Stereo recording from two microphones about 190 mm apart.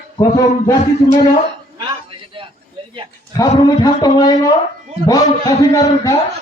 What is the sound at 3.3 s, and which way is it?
Speech, 20° left (ahead or behind).